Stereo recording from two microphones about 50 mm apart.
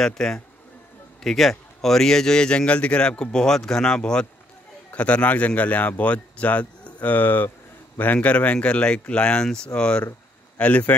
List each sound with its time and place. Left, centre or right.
0.0 s a man's voice: centre
4.9 s a man's voice: left